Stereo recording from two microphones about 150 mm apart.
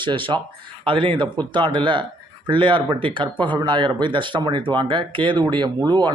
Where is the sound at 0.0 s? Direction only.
35° right (ahead or behind).